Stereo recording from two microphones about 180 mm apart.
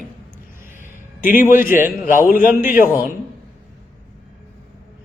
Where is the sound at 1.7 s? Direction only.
50° left (ahead or behind).